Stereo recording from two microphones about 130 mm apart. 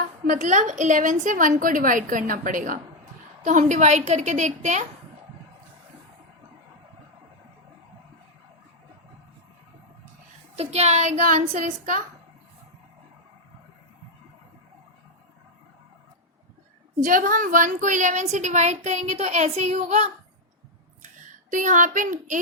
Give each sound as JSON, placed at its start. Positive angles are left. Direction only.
{"t": 0.3, "sound": "a woman's voice", "side_deg": -70}
{"t": 3.4, "sound": "a woman's voice", "side_deg": -75}
{"t": 10.6, "sound": "a woman's voice", "side_deg": -55}
{"t": 17.0, "sound": "a woman's voice", "side_deg": -90}
{"t": 21.5, "sound": "a child's voice", "side_deg": -80}